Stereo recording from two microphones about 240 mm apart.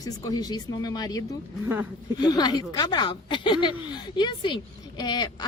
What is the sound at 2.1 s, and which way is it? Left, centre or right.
Speech, centre.